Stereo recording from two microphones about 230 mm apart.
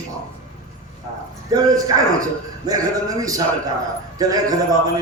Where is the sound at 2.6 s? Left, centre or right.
Centre.